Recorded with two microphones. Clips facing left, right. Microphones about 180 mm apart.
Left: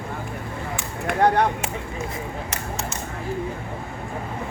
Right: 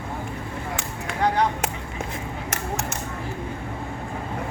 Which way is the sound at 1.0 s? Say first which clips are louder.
Left 4 dB; 55° left (ahead or behind).